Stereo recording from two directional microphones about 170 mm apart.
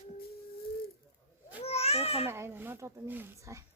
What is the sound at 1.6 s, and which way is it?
Babbling, 35° left (ahead or behind).